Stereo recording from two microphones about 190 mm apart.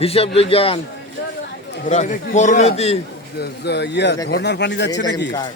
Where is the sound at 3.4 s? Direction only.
60° left (ahead or behind).